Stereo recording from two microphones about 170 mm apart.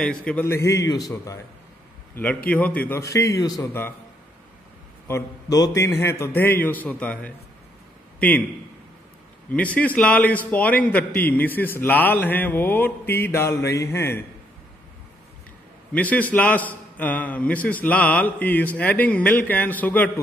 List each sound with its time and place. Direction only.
0.0 s a man's voice: 5° left (ahead or behind); by 1.4 s 20° left (ahead or behind)
2.5 s a man's voice: 10° left (ahead or behind)
5.0 s a man's voice: 20° left (ahead or behind)
9.8 s a man's voice: 10° left (ahead or behind)
15.9 s a man's voice: 10° left (ahead or behind)